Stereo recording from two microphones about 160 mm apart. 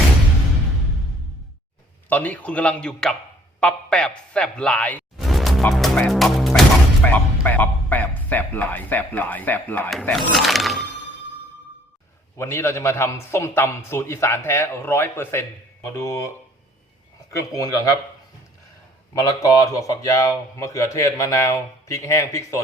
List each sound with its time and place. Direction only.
2.0 s a man's voice: 10° left (ahead or behind)
5.1 s music: centre (ahead or behind)
7.0 s a man's voice: 10° left (ahead or behind)
9.9 s speech: centre (ahead or behind)
12.4 s a man's voice: 15° left (ahead or behind)
17.5 s speech: 20° left (ahead or behind)
19.1 s speech: 20° left (ahead or behind)